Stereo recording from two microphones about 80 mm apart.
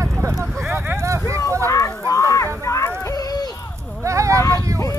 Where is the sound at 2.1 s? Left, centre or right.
Left.